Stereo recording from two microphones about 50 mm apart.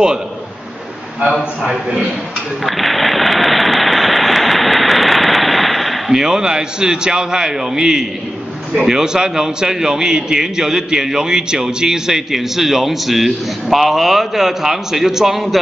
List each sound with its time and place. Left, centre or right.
1.7 s a man's voice: right
2.6 s a sound: centre
6.1 s a man's voice: centre